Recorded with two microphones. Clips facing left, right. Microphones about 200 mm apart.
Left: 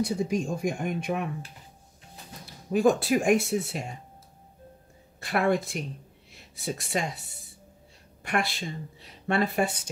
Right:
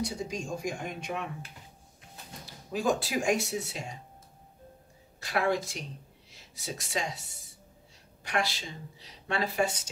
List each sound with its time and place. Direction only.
0.0 s speech: 55° left (ahead or behind)
2.7 s speech: 55° left (ahead or behind)
5.2 s speech: 55° left (ahead or behind)
8.2 s speech: 55° left (ahead or behind)